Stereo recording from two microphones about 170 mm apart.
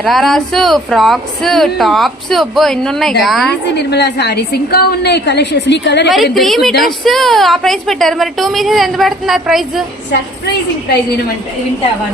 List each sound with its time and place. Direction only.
0.0 s speech: centre (ahead or behind)
3.8 s a woman's voice: 75° left (ahead or behind)
6.3 s speech: centre (ahead or behind)